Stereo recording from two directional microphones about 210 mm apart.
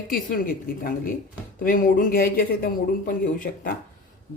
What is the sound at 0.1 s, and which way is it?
Speech, 40° left (ahead or behind).